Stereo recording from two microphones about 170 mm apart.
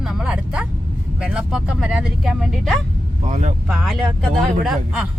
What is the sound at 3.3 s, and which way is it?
Speech, 45° right (ahead or behind).